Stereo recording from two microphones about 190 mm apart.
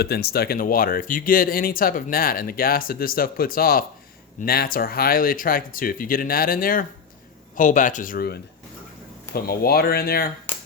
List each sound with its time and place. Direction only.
0.0 s speech: 55° left (ahead or behind)